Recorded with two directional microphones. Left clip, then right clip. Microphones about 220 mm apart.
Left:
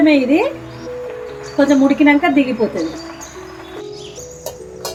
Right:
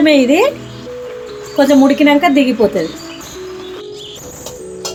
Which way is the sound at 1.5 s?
40° right (ahead or behind).